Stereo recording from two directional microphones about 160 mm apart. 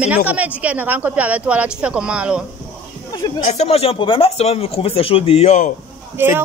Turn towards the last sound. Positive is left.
turn(degrees=-15)  # may be behind; listen again after turning